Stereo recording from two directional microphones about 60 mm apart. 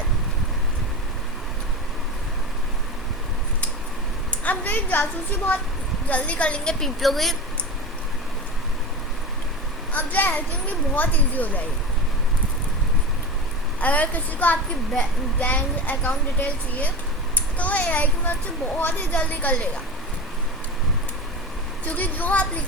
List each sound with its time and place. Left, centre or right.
4.4 s a woman's voice: left
6.1 s a woman's voice: left
6.7 s a woman's voice: centre
9.9 s a woman's voice: left
13.8 s a woman's voice: left
21.8 s a woman's voice: left